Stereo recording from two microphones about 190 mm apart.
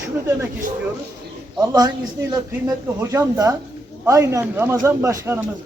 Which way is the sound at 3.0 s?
15° right (ahead or behind).